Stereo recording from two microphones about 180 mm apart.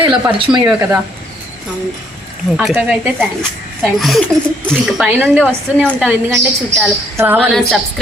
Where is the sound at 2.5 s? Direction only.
5° right (ahead or behind).